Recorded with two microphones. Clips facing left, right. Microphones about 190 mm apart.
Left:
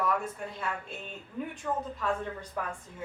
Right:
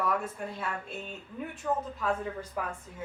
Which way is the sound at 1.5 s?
5° right (ahead or behind).